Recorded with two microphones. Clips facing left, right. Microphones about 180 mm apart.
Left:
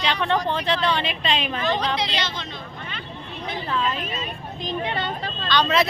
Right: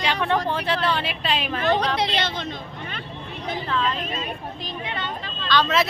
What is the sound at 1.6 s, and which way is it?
Speech, 60° right (ahead or behind).